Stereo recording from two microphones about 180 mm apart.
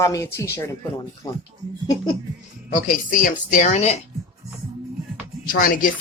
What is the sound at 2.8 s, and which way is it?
Speech, 45° left (ahead or behind).